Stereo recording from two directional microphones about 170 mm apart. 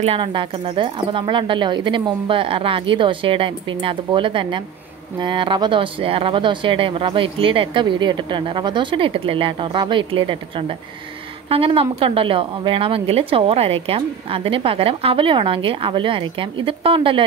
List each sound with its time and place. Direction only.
0.0 s speech: 30° right (ahead or behind)
11.4 s a woman's voice: 35° right (ahead or behind)